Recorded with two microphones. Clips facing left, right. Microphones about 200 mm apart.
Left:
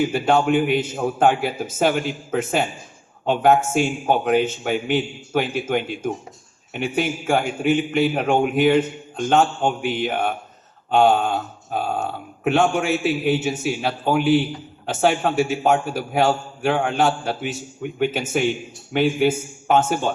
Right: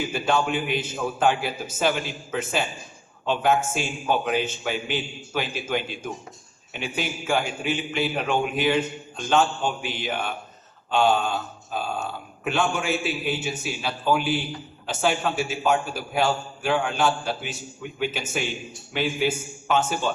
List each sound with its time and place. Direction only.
0.0 s a man's voice: 55° left (ahead or behind)